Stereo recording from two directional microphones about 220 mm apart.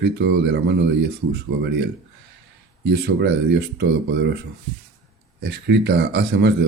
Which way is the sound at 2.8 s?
50° right (ahead or behind).